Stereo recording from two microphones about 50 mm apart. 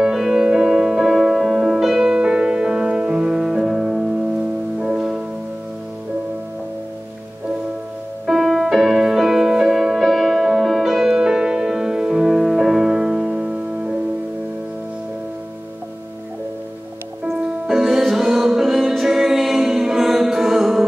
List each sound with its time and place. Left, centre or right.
0.0 s music: centre
8.3 s music: centre
17.3 s music: centre